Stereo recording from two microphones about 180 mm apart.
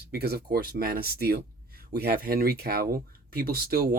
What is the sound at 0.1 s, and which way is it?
Speech, 60° right (ahead or behind).